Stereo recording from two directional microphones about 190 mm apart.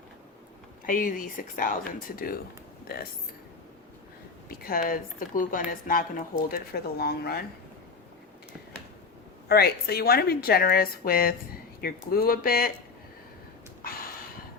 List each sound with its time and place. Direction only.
0.9 s a woman's voice: 45° left (ahead or behind)
4.4 s a woman's voice: 50° left (ahead or behind)
9.5 s a woman's voice: 55° left (ahead or behind)
13.8 s a sound: 50° left (ahead or behind)